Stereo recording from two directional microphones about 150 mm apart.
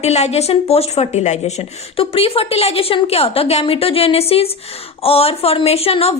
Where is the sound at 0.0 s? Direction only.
45° left (ahead or behind).